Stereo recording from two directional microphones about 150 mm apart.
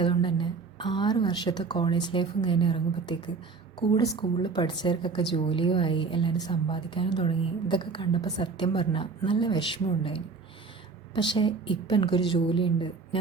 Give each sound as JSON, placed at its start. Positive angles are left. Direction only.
{"t": 0.0, "sound": "a woman's voice", "side_deg": 35}